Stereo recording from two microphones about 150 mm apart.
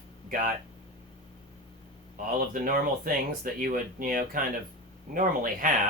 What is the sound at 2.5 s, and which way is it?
Speech, 70° right (ahead or behind).